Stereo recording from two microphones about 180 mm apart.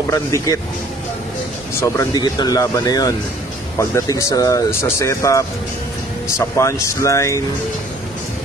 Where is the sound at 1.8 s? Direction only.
20° left (ahead or behind).